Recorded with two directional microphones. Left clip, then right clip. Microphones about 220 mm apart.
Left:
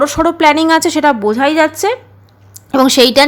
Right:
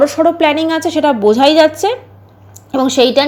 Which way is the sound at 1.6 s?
15° left (ahead or behind).